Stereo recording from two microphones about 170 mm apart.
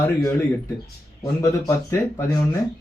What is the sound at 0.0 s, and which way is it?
Speech, 15° left (ahead or behind).